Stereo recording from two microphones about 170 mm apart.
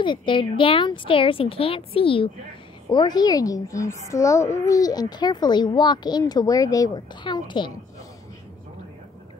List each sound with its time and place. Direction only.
0.0 s a woman's voice: 30° left (ahead or behind)